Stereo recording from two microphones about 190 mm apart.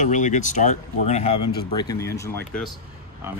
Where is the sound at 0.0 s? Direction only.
40° left (ahead or behind).